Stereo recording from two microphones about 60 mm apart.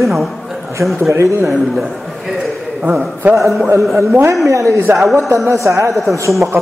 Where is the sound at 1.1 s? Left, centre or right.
Right.